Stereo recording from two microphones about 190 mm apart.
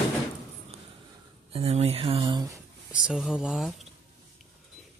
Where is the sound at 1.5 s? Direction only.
30° right (ahead or behind).